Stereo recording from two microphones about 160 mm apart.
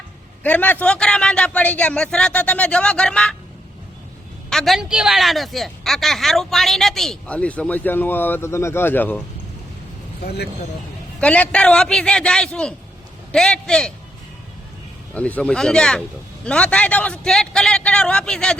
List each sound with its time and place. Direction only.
0.4 s a woman's voice: 10° left (ahead or behind)
4.4 s a woman's voice: centre (ahead or behind)
10.2 s speech: 90° left
11.2 s a woman's voice: 10° left (ahead or behind)
15.1 s a woman's voice: 10° left (ahead or behind)